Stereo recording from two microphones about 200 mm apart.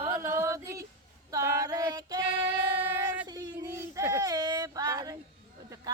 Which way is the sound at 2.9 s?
10° right (ahead or behind).